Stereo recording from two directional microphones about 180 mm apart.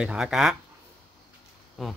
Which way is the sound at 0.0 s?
5° right (ahead or behind).